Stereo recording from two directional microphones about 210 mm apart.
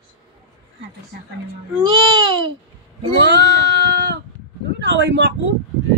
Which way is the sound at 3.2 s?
55° right (ahead or behind).